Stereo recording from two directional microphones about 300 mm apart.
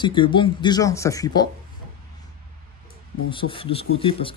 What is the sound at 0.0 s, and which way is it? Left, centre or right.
Speech, centre.